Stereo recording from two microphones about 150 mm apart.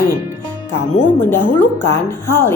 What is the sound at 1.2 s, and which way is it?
A woman's voice, 15° left (ahead or behind).